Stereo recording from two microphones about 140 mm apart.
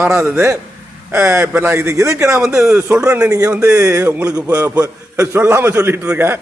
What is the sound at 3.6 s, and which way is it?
Speech, 20° right (ahead or behind).